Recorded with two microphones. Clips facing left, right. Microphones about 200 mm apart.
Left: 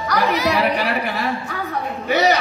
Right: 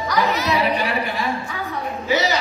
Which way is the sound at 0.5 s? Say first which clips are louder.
Left 1 dB; 65° left (ahead or behind).